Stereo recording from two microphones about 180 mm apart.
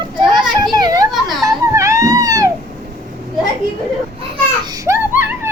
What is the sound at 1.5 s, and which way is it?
Baby cry, 15° right (ahead or behind).